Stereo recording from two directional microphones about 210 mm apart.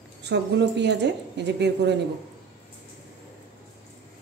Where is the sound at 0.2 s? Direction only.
55° right (ahead or behind).